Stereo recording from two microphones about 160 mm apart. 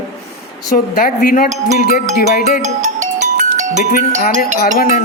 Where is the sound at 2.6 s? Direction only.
50° right (ahead or behind).